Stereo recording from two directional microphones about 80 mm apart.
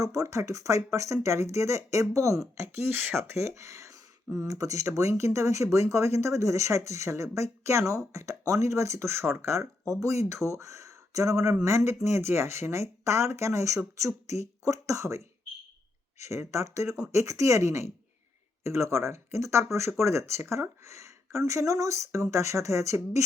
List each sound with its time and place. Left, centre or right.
0.0 s speech: right
2.7 s speech: right
3.3 s speech: right